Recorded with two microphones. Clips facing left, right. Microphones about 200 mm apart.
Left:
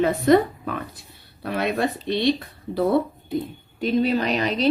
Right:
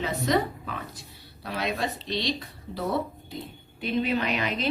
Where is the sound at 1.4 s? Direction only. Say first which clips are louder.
Left 6 dB; 55° left (ahead or behind); by 4.5 s 35° left (ahead or behind).